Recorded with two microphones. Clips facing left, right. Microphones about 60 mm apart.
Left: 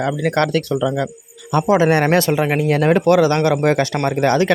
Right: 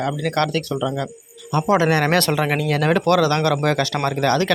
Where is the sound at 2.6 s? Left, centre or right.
Left.